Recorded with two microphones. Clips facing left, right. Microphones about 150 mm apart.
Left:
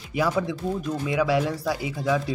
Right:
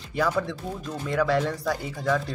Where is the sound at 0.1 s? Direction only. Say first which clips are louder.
Left 1 dB; 10° left (ahead or behind).